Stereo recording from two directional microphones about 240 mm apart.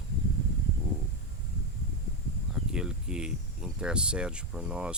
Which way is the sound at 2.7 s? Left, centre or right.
Centre.